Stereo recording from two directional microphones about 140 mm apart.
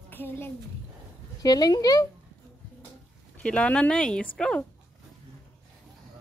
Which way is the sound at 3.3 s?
10° left (ahead or behind).